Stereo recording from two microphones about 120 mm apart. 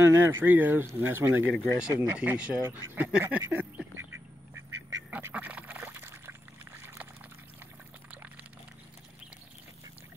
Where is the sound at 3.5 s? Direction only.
20° right (ahead or behind).